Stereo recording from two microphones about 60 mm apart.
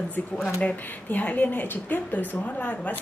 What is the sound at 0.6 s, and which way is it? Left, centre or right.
Speech, left.